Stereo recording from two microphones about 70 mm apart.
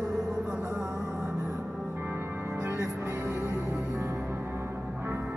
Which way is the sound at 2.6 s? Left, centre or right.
Right.